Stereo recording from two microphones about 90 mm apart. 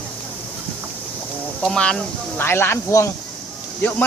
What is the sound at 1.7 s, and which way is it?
Speech, 10° left (ahead or behind).